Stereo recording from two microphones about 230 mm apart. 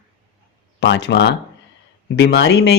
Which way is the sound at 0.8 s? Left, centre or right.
Left.